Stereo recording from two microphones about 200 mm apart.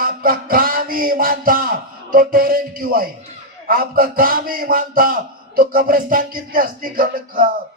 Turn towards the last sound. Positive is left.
turn(degrees=-45)  # may be behind; listen again after turning